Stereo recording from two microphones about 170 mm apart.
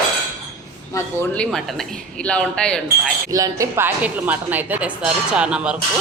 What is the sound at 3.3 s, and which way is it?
A woman's voice, 20° right (ahead or behind).